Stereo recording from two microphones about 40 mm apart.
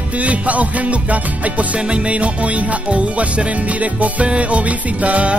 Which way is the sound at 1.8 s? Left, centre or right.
Right.